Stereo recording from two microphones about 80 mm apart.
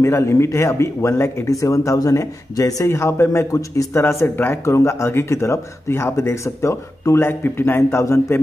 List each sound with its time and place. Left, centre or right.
0.0 s speech: left